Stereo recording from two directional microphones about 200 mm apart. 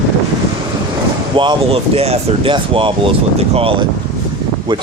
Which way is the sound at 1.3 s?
25° right (ahead or behind).